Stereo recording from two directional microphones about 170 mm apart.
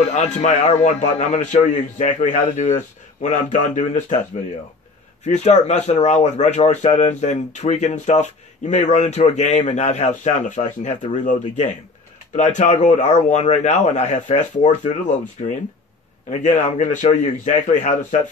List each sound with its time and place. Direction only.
0.1 s speech: 40° left (ahead or behind)
5.2 s speech: 40° left (ahead or behind)